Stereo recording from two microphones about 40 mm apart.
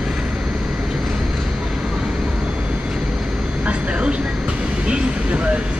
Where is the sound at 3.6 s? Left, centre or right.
Right.